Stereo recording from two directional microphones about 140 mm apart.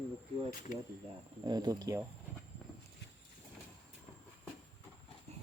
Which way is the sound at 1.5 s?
30° right (ahead or behind).